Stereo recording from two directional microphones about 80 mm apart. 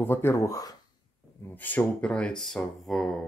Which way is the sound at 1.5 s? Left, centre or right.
Left.